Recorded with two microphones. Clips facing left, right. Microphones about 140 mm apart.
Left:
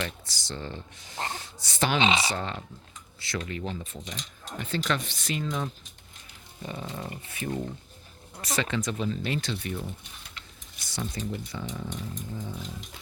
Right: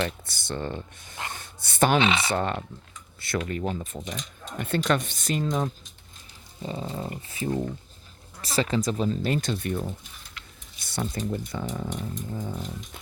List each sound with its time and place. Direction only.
0.3 s speech: 55° right (ahead or behind)
2.0 s speech: 20° left (ahead or behind)
2.3 s speech: 55° right (ahead or behind)
4.8 s speech: 45° right (ahead or behind)
6.6 s speech: 25° right (ahead or behind); by 9.8 s 50° right (ahead or behind)
10.8 s speech: 55° right (ahead or behind)